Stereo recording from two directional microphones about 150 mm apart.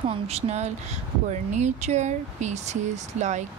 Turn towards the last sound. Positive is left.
turn(degrees=-50)  # may be behind; listen again after turning